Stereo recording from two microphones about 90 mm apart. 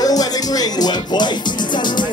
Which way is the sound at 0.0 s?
45° left (ahead or behind).